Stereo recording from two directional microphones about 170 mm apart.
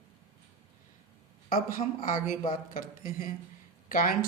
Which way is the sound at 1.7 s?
50° left (ahead or behind).